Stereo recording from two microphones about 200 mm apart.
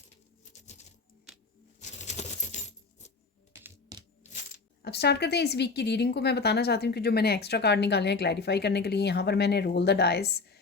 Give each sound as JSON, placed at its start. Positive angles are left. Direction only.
{"t": 0.5, "sound": "coin", "side_deg": 35}
{"t": 1.8, "sound": "coin", "side_deg": 35}
{"t": 3.5, "sound": "typing", "side_deg": -15}
{"t": 4.2, "sound": "coin", "side_deg": 35}
{"t": 4.8, "sound": "speech", "side_deg": 55}